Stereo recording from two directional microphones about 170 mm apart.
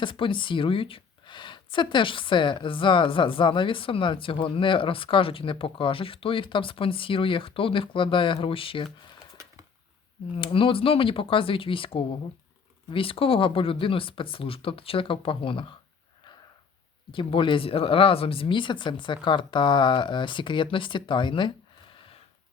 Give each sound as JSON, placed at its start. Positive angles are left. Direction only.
{"t": 0.0, "sound": "speech", "side_deg": 30}
{"t": 10.3, "sound": "speech", "side_deg": 30}
{"t": 17.1, "sound": "speech", "side_deg": 30}